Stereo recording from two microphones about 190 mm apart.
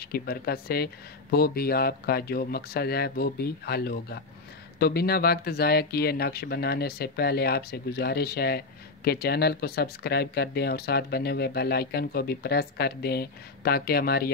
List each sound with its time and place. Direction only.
0.0 s speech: 55° left (ahead or behind)